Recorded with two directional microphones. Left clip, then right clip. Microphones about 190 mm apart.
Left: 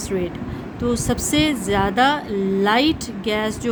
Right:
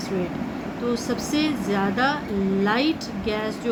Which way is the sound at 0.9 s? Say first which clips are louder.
Left 4 dB; 60° left (ahead or behind).